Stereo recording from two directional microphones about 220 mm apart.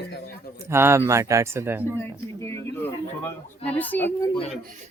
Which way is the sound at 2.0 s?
10° left (ahead or behind).